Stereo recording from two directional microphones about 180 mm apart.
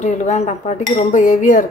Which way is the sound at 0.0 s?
40° left (ahead or behind).